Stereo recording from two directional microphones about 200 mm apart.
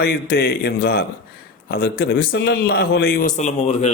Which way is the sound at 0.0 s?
50° left (ahead or behind).